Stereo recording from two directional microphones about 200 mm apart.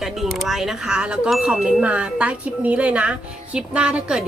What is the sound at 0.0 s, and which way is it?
Speech, centre (ahead or behind).